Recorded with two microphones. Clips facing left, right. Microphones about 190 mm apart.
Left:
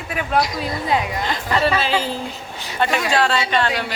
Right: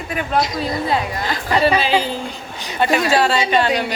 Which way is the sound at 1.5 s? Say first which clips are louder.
Right 3 dB; 15° right (ahead or behind).